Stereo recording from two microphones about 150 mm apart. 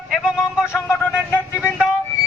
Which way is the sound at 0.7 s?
15° left (ahead or behind).